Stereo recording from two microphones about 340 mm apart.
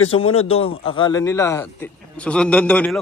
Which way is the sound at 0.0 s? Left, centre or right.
Left.